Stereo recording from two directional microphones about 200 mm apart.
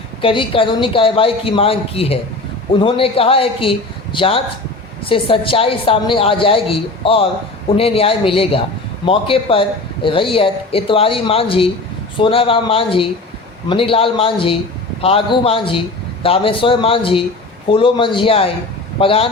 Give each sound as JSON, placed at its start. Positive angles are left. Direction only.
{"t": 0.2, "sound": "a man's voice", "side_deg": 25}